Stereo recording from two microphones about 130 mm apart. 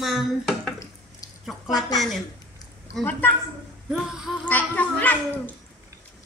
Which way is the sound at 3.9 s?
5° right (ahead or behind).